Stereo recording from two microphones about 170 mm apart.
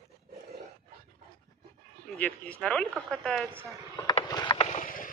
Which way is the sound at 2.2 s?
10° left (ahead or behind).